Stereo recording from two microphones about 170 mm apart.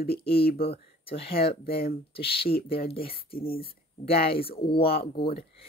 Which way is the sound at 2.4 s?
65° left (ahead or behind).